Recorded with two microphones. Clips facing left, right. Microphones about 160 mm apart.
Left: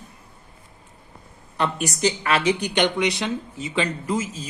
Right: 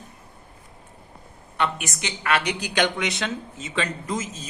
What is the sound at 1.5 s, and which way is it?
Speech, 35° left (ahead or behind).